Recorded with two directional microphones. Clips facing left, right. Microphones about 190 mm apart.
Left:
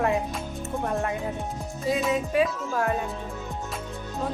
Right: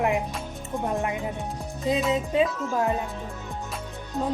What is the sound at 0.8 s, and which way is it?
Speech, 15° right (ahead or behind).